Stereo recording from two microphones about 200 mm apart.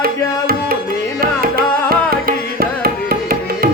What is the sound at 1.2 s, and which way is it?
Music, 50° right (ahead or behind).